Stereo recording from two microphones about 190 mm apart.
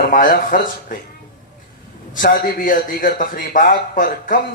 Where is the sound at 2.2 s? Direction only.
45° left (ahead or behind).